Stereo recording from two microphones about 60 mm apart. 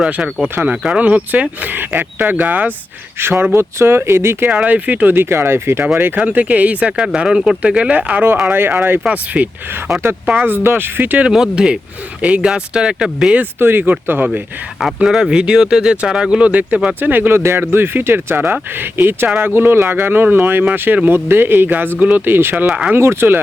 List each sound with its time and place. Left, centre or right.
0.4 s speech: right
3.2 s speech: right
4.4 s speech: right
5.1 s speech: right
6.1 s speech: right
8.4 s speech: right
9.0 s speech: right
10.3 s speech: right
11.2 s speech: centre
13.6 s speech: right
15.0 s speech: centre; by 22.2 s right
22.3 s speech: right
22.5 s speech: centre
23.0 s speech: right